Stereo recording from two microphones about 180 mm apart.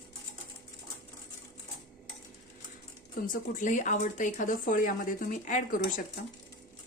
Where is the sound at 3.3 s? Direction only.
45° left (ahead or behind).